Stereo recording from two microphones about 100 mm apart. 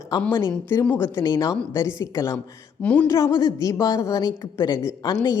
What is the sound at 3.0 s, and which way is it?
A woman's voice, 30° left (ahead or behind).